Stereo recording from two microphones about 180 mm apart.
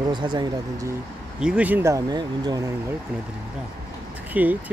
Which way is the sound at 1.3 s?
5° right (ahead or behind).